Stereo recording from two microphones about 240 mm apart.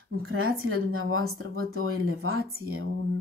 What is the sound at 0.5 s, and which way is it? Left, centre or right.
Speech, right.